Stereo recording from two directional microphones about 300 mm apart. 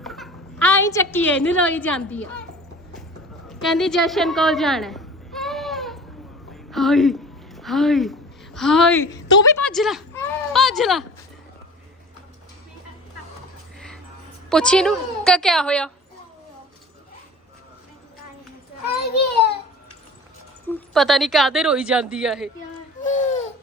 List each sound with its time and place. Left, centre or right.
0.0 s a woman's voice: centre
3.6 s a sound: centre
8.5 s speech: centre
14.5 s speech: centre
20.7 s speech: centre
23.0 s a sound: left